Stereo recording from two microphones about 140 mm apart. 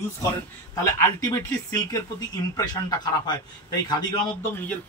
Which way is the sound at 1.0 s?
20° left (ahead or behind).